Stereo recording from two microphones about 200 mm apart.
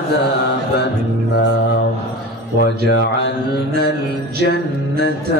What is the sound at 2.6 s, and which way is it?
Speech, 60° left (ahead or behind).